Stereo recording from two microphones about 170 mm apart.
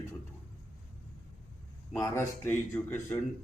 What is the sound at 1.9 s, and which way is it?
A man's voice, 15° left (ahead or behind).